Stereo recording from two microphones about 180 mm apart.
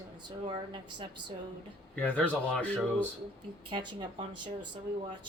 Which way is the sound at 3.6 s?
25° right (ahead or behind).